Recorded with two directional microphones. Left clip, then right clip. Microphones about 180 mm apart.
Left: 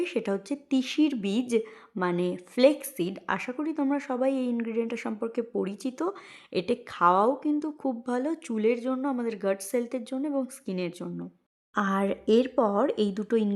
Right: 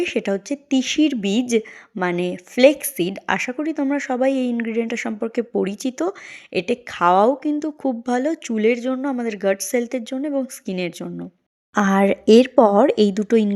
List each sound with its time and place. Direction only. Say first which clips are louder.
0.0 s a woman's voice: right 7 dB; 15° right (ahead or behind)